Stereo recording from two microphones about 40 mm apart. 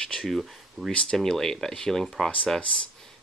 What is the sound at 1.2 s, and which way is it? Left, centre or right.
Speech, centre.